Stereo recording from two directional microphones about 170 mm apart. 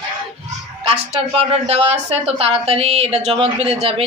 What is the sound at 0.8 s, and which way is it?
A woman's voice, 35° right (ahead or behind).